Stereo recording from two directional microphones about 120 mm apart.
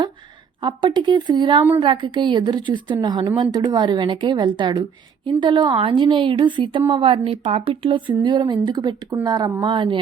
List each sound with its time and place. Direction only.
0.6 s a woman's voice: 40° right (ahead or behind)